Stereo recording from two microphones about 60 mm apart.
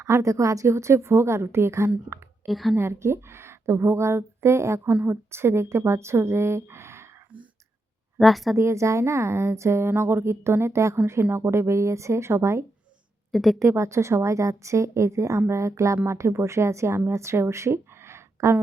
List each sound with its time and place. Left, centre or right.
0.0 s a woman's voice: right
2.5 s speech: centre
2.7 s a woman's voice: right
8.2 s speech: centre
8.5 s a woman's voice: right
13.3 s speech: centre
13.6 s a woman's voice: right